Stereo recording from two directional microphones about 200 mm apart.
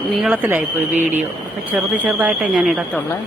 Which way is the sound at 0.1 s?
5° right (ahead or behind).